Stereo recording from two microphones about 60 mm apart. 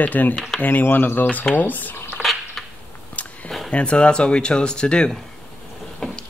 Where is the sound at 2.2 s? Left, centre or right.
Centre.